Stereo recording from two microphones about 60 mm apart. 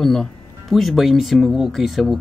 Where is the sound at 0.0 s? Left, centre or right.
Centre.